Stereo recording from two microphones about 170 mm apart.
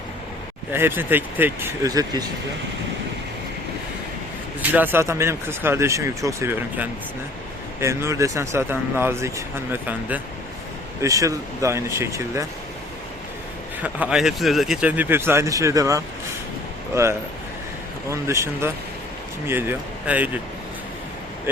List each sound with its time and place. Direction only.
0.7 s speech: 15° right (ahead or behind)
4.7 s speech: 10° right (ahead or behind)
11.0 s speech: 20° right (ahead or behind)
13.8 s speech: 5° right (ahead or behind)